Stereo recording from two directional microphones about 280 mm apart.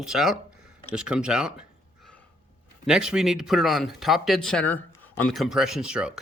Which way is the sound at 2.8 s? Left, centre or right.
Centre.